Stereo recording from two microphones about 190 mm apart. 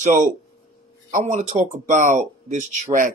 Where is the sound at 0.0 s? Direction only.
40° right (ahead or behind).